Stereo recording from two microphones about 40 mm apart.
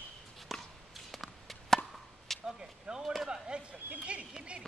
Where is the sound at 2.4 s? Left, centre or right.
Centre.